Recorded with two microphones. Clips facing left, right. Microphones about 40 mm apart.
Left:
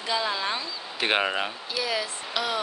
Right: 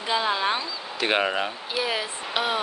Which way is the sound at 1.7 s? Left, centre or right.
Right.